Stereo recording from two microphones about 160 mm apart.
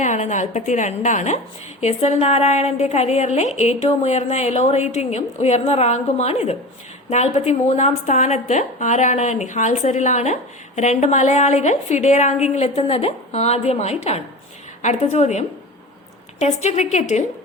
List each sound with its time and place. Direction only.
0.0 s a woman's voice: 50° left (ahead or behind)